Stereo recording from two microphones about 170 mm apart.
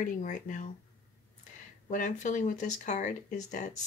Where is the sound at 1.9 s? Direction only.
45° left (ahead or behind).